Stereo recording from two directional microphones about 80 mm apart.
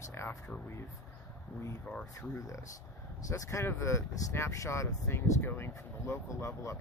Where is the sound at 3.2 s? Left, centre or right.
Left.